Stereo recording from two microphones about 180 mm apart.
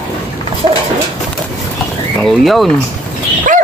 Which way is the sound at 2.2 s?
Centre (ahead or behind).